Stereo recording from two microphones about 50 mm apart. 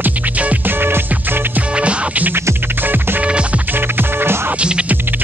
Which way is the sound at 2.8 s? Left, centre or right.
Right.